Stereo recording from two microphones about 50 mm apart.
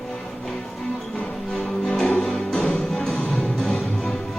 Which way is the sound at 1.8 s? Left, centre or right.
Centre.